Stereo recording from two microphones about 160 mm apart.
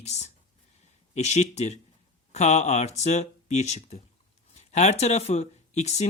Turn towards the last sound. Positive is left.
turn(degrees=45)  # may be behind; listen again after turning